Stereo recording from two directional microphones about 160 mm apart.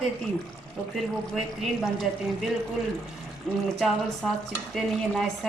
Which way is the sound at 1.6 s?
Centre (ahead or behind).